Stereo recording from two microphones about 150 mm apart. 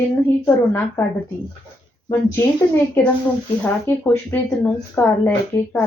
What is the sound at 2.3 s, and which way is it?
Speech, 15° left (ahead or behind).